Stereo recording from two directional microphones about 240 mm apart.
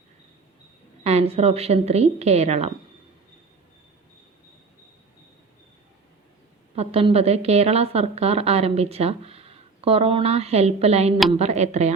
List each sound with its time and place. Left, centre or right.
1.0 s a woman's voice: right
6.7 s a woman's voice: right